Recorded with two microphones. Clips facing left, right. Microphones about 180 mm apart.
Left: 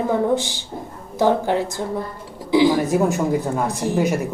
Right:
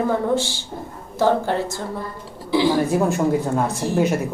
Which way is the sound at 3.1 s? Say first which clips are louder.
Right 1 dB; centre (ahead or behind).